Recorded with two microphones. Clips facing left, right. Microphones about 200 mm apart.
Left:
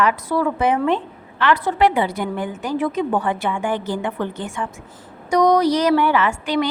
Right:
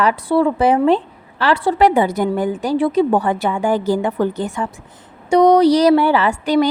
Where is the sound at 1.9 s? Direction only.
45° right (ahead or behind).